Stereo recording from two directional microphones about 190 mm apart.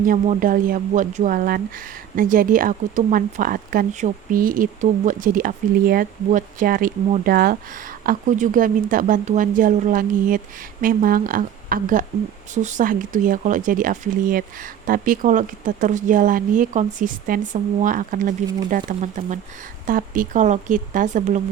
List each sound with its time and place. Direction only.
0.0 s speech: 45° right (ahead or behind)